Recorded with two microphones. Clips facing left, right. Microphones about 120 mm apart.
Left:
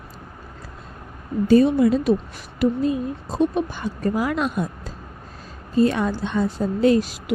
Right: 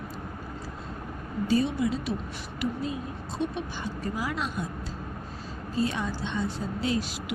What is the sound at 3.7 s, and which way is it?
Speech, 55° left (ahead or behind).